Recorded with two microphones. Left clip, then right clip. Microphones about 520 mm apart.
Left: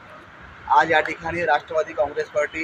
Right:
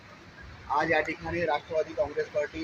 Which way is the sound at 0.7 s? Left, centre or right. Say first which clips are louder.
Left 9 dB; right.